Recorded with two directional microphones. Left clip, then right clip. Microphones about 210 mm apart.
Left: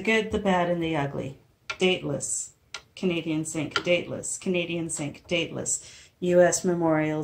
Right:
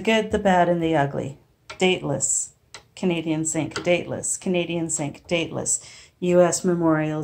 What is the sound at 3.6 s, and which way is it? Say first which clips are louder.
A woman's voice: right 1 dB; centre (ahead or behind).